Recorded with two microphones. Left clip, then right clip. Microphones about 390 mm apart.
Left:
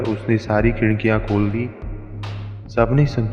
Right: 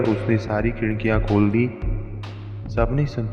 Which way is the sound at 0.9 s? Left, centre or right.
Left.